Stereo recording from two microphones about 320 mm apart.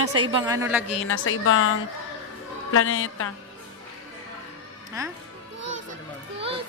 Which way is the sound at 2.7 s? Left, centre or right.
Left.